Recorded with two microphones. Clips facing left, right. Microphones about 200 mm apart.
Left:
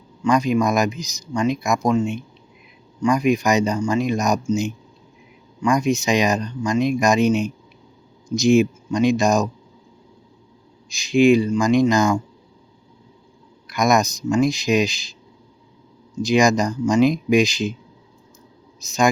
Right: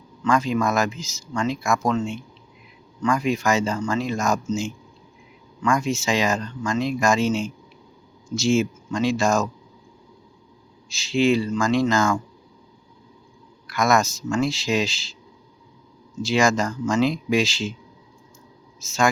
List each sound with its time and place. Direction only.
0.2 s speech: 15° left (ahead or behind)
10.8 s speech: 15° left (ahead or behind)
13.7 s speech: 15° left (ahead or behind)
16.2 s speech: 15° left (ahead or behind)
18.8 s speech: 15° left (ahead or behind)